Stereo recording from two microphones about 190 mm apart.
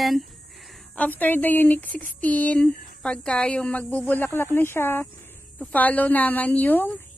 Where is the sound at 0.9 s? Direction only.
10° left (ahead or behind).